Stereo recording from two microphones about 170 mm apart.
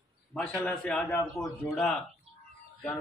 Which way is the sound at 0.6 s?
15° left (ahead or behind).